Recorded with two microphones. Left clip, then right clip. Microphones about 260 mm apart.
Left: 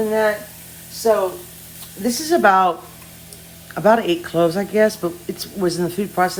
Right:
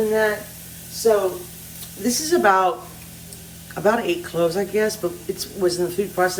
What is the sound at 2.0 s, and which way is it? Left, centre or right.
Speech, left.